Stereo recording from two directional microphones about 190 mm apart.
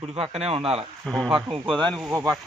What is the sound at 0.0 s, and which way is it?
Speech, 30° right (ahead or behind).